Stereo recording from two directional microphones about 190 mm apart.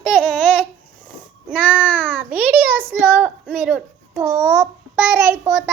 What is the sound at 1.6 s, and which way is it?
A child's voice, 5° right (ahead or behind).